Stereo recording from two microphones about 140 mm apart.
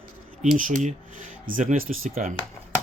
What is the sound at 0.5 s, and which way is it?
Speech, 70° right (ahead or behind).